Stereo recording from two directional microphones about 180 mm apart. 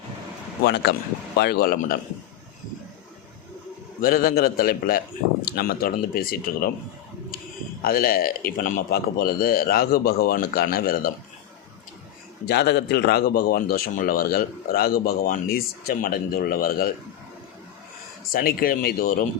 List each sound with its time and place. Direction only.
0.6 s a man's voice: 65° left (ahead or behind)
4.0 s a man's voice: 55° left (ahead or behind)
7.8 s a man's voice: 55° left (ahead or behind)
12.5 s a man's voice: 65° left (ahead or behind)
18.3 s a man's voice: 55° left (ahead or behind)